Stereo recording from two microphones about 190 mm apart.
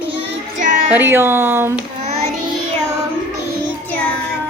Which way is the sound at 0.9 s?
10° right (ahead or behind).